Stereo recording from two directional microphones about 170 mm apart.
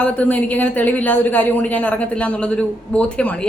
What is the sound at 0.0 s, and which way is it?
Speech, 10° left (ahead or behind).